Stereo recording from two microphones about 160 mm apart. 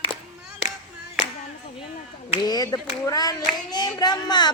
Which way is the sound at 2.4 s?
25° left (ahead or behind).